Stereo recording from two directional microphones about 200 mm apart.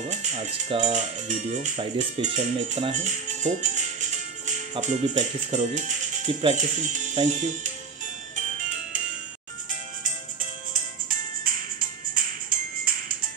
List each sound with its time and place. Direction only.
0.1 s speech: 35° right (ahead or behind)
10.7 s music: 45° right (ahead or behind)